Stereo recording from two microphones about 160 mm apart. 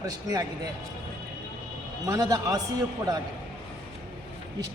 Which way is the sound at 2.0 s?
20° right (ahead or behind).